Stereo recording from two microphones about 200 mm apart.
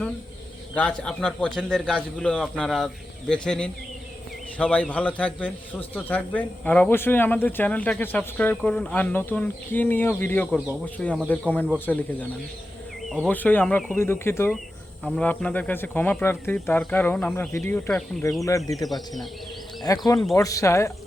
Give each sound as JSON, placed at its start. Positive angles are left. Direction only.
{"t": 0.8, "sound": "a man's voice", "side_deg": 5}
{"t": 19.9, "sound": "speech", "side_deg": 15}